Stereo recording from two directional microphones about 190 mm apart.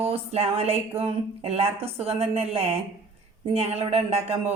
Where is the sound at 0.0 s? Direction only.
30° right (ahead or behind).